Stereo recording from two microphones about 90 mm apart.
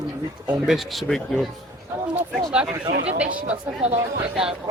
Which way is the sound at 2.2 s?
10° right (ahead or behind).